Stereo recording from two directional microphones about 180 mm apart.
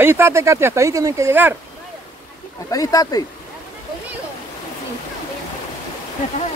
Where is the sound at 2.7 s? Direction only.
20° left (ahead or behind).